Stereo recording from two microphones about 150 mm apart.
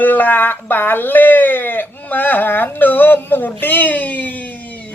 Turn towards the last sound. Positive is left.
turn(degrees=10)  # may be behind; listen again after turning